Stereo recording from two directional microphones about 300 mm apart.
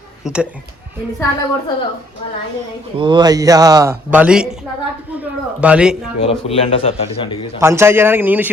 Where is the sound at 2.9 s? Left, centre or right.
Centre.